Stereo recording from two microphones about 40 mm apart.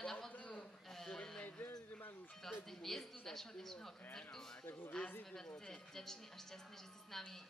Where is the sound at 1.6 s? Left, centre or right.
Left.